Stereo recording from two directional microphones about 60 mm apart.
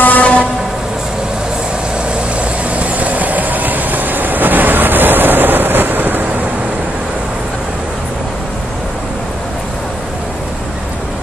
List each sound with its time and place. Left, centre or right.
0.0 s train: left
2.7 s train: right